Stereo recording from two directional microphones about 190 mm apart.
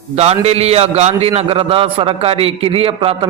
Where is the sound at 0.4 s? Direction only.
35° right (ahead or behind).